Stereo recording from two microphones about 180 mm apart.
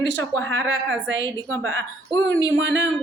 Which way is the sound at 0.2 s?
15° left (ahead or behind).